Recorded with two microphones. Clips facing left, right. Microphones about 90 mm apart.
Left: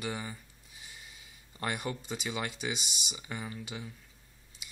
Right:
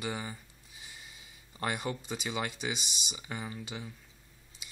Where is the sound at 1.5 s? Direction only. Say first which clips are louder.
Right 1 dB; 5° right (ahead or behind).